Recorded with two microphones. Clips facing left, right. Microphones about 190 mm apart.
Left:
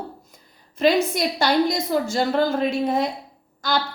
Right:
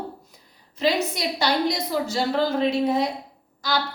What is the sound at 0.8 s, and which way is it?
A woman's voice, 50° left (ahead or behind).